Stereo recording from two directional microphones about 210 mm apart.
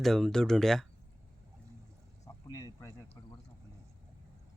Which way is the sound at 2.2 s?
15° left (ahead or behind).